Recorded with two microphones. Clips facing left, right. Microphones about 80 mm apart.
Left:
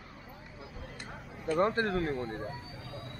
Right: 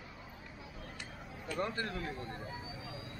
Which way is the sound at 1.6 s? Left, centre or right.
Left.